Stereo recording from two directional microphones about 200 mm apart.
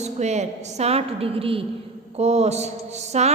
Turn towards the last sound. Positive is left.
turn(degrees=-35)  # may be behind; listen again after turning